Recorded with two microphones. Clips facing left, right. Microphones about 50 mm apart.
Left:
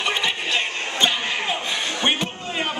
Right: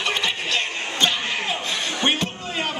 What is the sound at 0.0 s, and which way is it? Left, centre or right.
Chuckle, centre.